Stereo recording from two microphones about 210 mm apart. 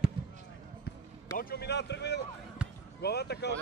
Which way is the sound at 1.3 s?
50° left (ahead or behind).